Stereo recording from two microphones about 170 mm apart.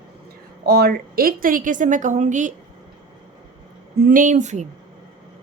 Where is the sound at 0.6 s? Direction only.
65° right (ahead or behind); by 2.5 s 45° right (ahead or behind).